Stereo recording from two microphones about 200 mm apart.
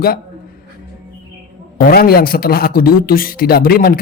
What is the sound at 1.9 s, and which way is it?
A woman's voice, 50° left (ahead or behind).